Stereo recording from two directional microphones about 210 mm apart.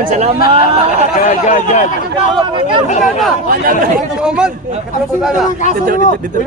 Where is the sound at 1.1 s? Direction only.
35° left (ahead or behind).